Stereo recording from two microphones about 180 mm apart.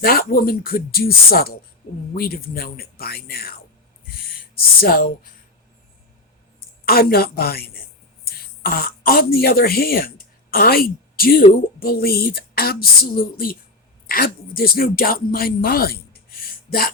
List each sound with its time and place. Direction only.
0.0 s speech: 55° left (ahead or behind)
4.8 s speech: 55° left (ahead or behind)
6.8 s speech: 55° left (ahead or behind)